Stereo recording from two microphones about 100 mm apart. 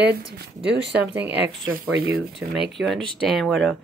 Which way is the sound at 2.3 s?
Centre (ahead or behind).